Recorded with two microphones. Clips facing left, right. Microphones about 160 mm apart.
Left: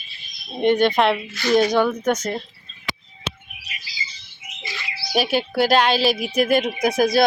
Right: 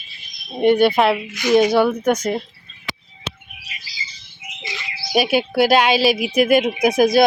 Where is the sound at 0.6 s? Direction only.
10° right (ahead or behind).